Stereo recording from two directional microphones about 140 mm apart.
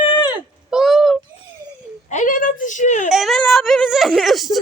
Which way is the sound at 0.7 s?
Centre (ahead or behind).